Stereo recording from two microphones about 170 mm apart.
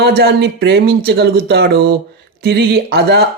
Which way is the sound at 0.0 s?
70° right (ahead or behind).